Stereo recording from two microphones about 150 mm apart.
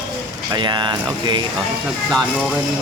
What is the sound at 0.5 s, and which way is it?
Speech, 30° right (ahead or behind).